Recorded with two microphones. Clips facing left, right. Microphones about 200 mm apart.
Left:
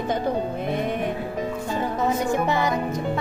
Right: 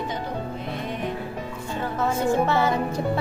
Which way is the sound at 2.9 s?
30° right (ahead or behind).